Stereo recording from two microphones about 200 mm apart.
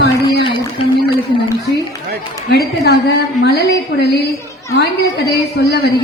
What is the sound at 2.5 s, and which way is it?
A woman's voice, 55° left (ahead or behind).